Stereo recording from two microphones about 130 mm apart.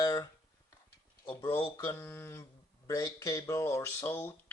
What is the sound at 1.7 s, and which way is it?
Speech, 20° left (ahead or behind).